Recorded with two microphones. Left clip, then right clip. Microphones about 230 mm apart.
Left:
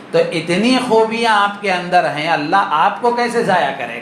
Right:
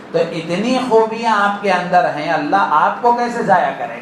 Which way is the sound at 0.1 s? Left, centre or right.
Left.